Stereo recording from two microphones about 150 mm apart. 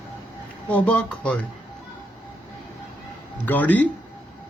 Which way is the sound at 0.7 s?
10° left (ahead or behind).